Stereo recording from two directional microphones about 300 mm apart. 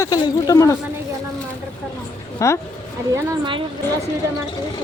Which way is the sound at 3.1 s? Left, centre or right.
Centre.